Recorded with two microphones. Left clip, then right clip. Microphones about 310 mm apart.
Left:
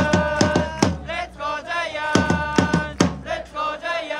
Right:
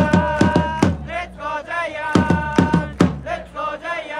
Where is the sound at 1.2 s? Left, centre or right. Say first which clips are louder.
Right 1 dB; right.